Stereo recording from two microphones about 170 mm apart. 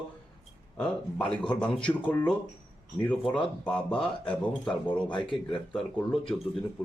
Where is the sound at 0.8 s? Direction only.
5° left (ahead or behind).